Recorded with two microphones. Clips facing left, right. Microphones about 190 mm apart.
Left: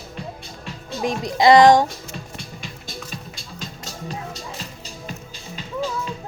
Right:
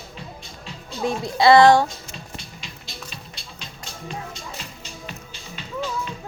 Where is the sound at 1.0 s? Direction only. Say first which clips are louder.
Left 1 dB; 15° left (ahead or behind).